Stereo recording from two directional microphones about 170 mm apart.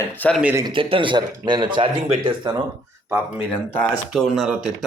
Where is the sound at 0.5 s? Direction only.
25° right (ahead or behind).